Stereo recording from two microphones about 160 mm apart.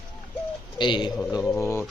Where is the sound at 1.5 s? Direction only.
15° left (ahead or behind).